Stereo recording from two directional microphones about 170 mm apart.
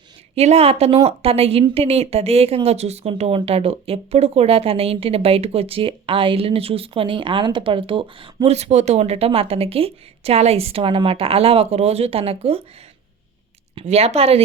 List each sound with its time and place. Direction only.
0.3 s speech: 35° right (ahead or behind)
13.7 s speech: 35° right (ahead or behind)